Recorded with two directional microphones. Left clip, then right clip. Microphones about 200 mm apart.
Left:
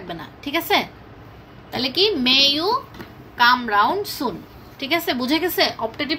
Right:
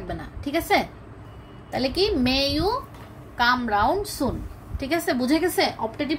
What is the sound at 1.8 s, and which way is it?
Speech, 40° right (ahead or behind).